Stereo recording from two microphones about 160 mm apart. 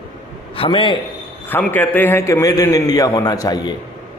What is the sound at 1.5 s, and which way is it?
A man's voice, 10° left (ahead or behind).